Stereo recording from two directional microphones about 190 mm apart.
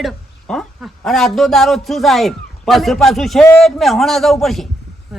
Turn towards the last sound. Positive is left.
turn(degrees=0)  # may be behind; listen again after turning